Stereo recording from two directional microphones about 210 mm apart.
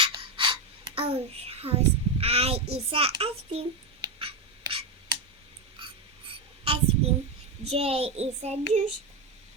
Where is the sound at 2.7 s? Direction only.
30° right (ahead or behind).